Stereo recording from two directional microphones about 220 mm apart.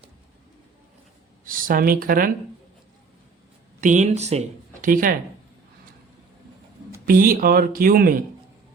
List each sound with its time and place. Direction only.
1.5 s speech: 40° right (ahead or behind)
3.8 s speech: 35° right (ahead or behind)
7.0 s speech: 40° right (ahead or behind)